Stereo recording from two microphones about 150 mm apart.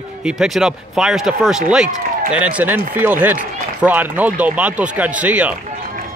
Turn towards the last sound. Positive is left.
turn(degrees=-10)  # may be behind; listen again after turning